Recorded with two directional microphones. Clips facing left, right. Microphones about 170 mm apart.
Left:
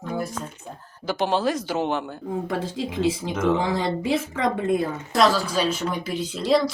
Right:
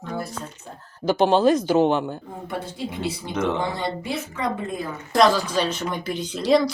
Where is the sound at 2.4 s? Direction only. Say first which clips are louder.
Left 3 dB; 90° left.